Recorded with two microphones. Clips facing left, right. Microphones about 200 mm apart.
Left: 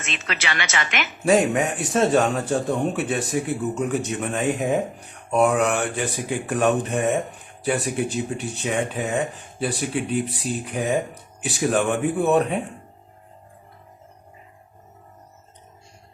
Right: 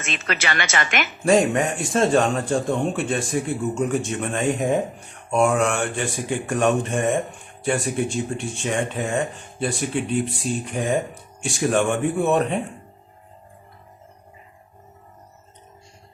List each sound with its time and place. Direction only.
0.0 s a woman's voice: 50° right (ahead or behind)
1.2 s speech: 5° left (ahead or behind)
7.3 s a sound: centre (ahead or behind)
7.9 s speech: 5° left (ahead or behind)